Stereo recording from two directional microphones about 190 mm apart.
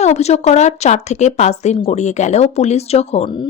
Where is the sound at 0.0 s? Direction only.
35° left (ahead or behind).